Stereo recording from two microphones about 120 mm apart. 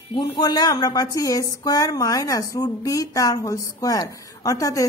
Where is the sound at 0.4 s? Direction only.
35° left (ahead or behind).